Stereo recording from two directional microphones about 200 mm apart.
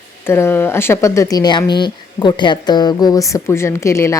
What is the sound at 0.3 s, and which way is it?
Speech, 10° left (ahead or behind).